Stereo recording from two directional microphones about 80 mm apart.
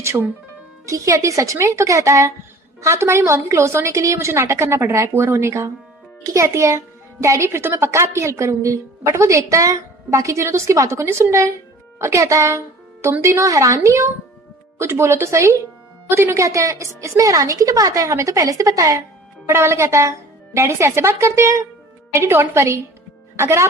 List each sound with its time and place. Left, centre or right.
0.0 s a child's voice: right
19.5 s a child's voice: right